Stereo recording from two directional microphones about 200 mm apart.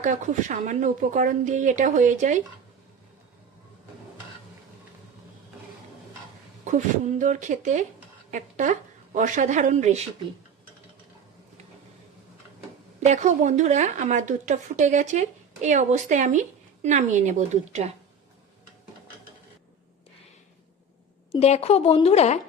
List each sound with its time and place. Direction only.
0.0 s speech: 40° right (ahead or behind)
6.7 s speech: 40° right (ahead or behind)
13.1 s speech: 35° right (ahead or behind)
21.3 s a woman's voice: 30° left (ahead or behind)